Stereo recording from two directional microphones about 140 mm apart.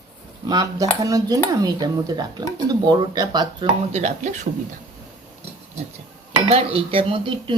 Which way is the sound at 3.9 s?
55° right (ahead or behind).